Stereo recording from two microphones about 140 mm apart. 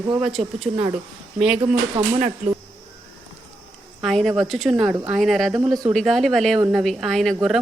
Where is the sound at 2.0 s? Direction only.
40° right (ahead or behind).